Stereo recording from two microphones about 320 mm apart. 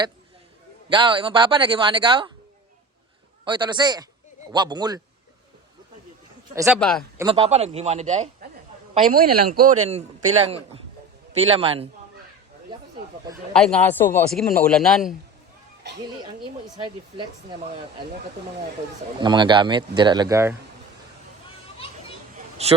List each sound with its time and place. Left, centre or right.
0.9 s a man's voice: centre
3.4 s a man's voice: centre
6.5 s a man's voice: centre
6.7 s a man's voice: centre
7.2 s a man's voice: centre
13.5 s a man's voice: centre
16.7 s a man's voice: centre
19.2 s a man's voice: centre
22.6 s speech: centre